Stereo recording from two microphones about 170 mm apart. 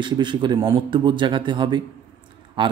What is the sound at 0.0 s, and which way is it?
Speech, 30° right (ahead or behind).